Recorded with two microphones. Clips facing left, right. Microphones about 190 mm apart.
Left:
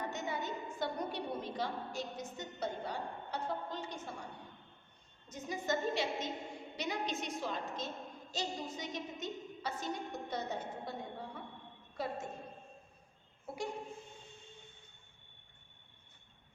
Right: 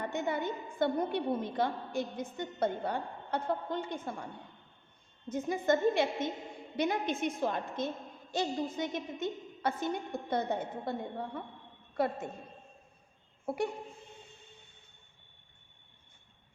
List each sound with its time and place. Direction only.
0.1 s a woman's voice: 55° right (ahead or behind)
5.3 s a woman's voice: 55° right (ahead or behind)
13.4 s speech: 55° right (ahead or behind)